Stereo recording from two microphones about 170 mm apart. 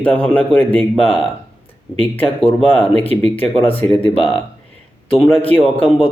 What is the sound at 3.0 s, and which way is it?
Speech, 35° left (ahead or behind).